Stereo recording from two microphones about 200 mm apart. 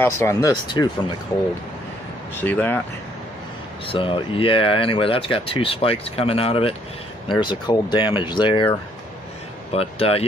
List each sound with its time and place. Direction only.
0.0 s speech: 15° left (ahead or behind)
2.4 s speech: 10° left (ahead or behind)
3.8 s speech: 25° left (ahead or behind)
9.7 s speech: 30° left (ahead or behind)